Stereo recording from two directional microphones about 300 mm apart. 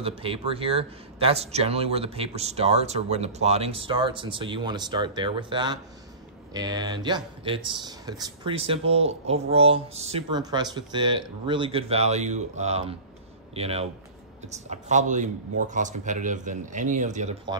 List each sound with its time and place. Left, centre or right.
0.0 s speech: centre